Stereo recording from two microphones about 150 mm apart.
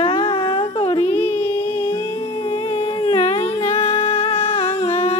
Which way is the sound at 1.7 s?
40° left (ahead or behind).